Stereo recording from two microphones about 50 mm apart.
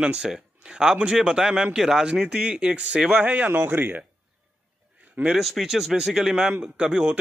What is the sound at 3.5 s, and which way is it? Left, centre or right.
Speech, right.